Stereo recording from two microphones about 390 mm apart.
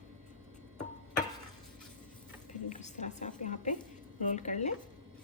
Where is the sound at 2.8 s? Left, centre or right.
Centre.